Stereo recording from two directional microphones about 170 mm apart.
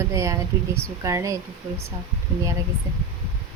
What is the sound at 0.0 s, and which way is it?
Speech, 20° right (ahead or behind).